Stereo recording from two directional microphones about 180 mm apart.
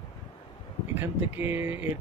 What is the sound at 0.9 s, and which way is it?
Speech, 10° right (ahead or behind).